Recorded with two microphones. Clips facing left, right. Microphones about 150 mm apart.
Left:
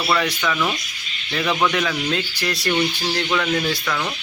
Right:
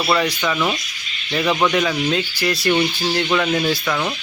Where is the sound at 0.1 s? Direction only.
15° right (ahead or behind).